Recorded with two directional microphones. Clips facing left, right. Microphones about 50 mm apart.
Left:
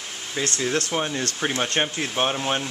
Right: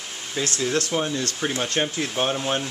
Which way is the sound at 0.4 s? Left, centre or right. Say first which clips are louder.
Even; centre.